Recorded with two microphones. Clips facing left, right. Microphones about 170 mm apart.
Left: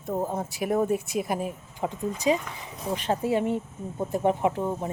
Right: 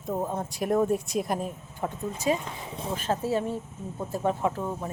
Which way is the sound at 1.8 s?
15° left (ahead or behind).